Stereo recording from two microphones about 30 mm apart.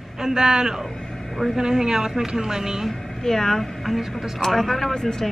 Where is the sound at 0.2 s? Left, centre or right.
Right.